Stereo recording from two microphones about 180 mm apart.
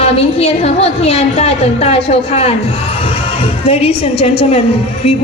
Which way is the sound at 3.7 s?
35° left (ahead or behind).